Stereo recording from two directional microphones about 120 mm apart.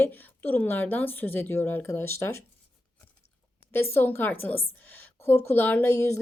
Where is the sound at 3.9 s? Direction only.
15° left (ahead or behind).